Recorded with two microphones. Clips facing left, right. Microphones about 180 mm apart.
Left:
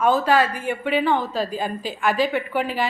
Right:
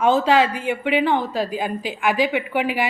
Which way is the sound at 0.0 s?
20° right (ahead or behind).